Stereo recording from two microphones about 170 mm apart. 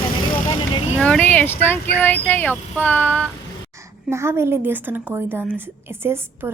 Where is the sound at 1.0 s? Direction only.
10° left (ahead or behind).